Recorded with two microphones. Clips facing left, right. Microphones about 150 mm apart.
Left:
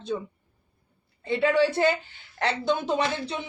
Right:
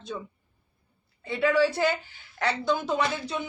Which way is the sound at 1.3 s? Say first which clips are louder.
Left 1 dB; 25° left (ahead or behind).